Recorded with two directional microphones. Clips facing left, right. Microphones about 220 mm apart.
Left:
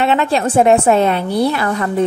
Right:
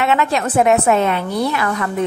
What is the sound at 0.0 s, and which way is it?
A woman's voice, 30° left (ahead or behind).